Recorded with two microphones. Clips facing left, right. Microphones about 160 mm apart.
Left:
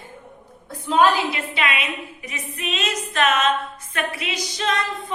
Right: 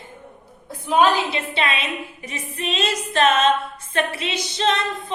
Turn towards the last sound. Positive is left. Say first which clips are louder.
# right 2 dB
turn(degrees=-25)  # may be behind; listen again after turning